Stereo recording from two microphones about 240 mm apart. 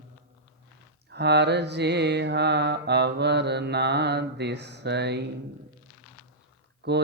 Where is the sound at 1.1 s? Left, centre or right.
Right.